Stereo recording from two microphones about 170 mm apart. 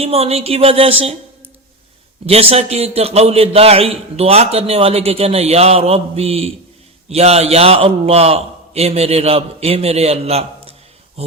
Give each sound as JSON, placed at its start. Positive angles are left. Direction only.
{"t": 0.0, "sound": "a man's voice", "side_deg": -35}
{"t": 2.2, "sound": "a man's voice", "side_deg": -35}